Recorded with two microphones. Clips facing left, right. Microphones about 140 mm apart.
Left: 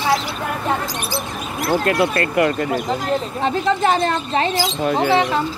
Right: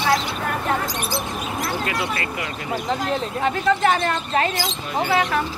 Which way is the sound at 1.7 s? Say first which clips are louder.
Left 11 dB; 55° left (ahead or behind).